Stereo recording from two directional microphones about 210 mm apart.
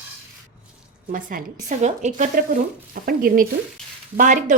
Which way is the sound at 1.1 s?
40° right (ahead or behind).